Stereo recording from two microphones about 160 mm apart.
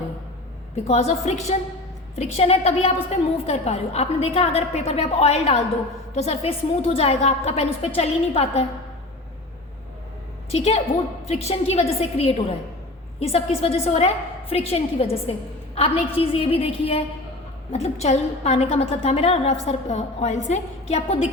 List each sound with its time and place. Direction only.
0.9 s a woman's voice: 40° left (ahead or behind)
10.5 s a woman's voice: 40° left (ahead or behind)